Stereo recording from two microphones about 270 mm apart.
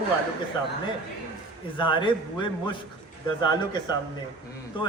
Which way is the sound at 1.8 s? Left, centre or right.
Centre.